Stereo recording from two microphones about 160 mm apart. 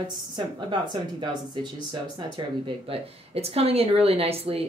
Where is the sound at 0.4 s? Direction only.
30° right (ahead or behind).